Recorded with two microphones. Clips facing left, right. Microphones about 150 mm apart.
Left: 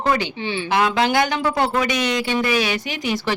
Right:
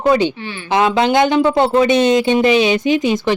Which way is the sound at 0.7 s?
20° right (ahead or behind).